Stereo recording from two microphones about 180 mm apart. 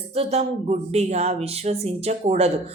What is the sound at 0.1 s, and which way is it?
Speech, 35° right (ahead or behind).